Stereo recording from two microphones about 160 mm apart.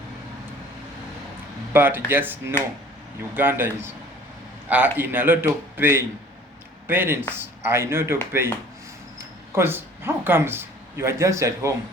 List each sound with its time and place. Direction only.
1.7 s speech: 10° right (ahead or behind)
9.6 s speech: 15° right (ahead or behind)